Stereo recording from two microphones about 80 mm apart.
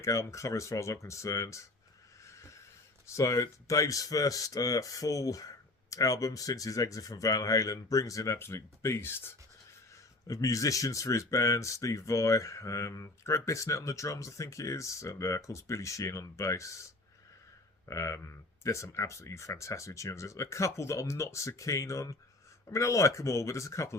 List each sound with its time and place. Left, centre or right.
0.0 s speech: left
2.2 s train: left
3.2 s speech: left
10.2 s speech: left
17.8 s speech: left